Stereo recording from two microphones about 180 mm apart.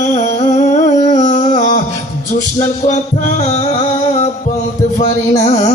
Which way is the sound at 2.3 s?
45° left (ahead or behind).